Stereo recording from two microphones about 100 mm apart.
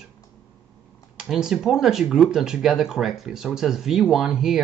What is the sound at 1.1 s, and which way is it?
Speech, 5° right (ahead or behind).